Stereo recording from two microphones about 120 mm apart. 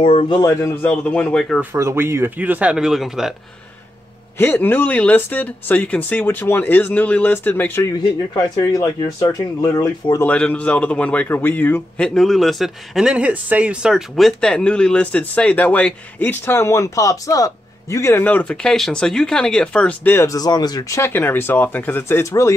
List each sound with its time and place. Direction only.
0.0 s a man's voice: 50° left (ahead or behind)
0.4 s speech: 25° left (ahead or behind)
0.8 s a man's voice: 10° left (ahead or behind)
1.6 s speech: 20° right (ahead or behind); by 3.3 s 5° right (ahead or behind)
4.4 s a man's voice: 15° left (ahead or behind)
8.5 s speech: 30° left (ahead or behind)
10.2 s a man's voice: 10° left (ahead or behind)
12.1 s a man's voice: centre (ahead or behind)
20.2 s speech: 30° left (ahead or behind)
21.0 s a man's voice: 15° left (ahead or behind)